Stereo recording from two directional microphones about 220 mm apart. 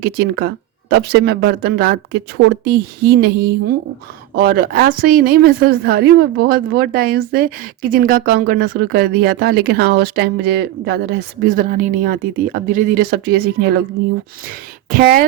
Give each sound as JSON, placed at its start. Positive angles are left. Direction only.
{"t": 0.0, "sound": "a woman's voice", "side_deg": -45}
{"t": 14.4, "sound": "speech", "side_deg": -40}